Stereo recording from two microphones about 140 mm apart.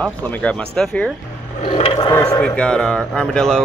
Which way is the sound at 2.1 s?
25° left (ahead or behind).